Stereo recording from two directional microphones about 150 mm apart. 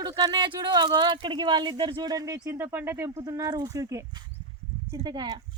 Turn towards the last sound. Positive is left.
turn(degrees=-30)  # may be behind; listen again after turning